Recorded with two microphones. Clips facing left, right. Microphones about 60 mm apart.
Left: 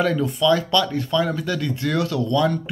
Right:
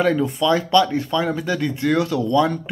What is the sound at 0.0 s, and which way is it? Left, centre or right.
Speech, centre.